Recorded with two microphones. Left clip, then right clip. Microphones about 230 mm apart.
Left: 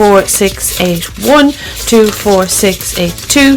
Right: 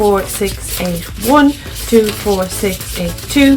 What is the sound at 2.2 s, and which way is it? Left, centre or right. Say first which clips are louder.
Speech: left 7 dB; left.